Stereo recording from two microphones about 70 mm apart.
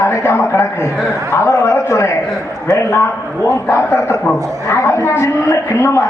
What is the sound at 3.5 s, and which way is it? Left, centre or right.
A man's voice, left.